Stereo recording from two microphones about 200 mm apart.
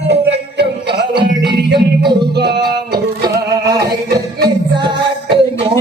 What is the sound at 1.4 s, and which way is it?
Music, 25° right (ahead or behind).